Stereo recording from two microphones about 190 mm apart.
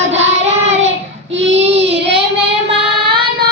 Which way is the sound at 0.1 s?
35° right (ahead or behind).